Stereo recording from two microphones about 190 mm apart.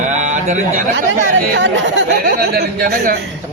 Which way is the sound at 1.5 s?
70° right (ahead or behind).